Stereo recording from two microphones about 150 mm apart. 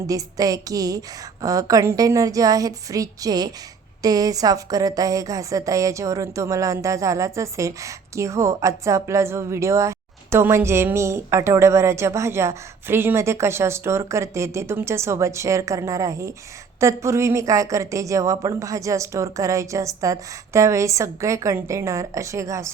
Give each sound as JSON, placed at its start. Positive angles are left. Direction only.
{"t": 0.1, "sound": "a woman's voice", "side_deg": -25}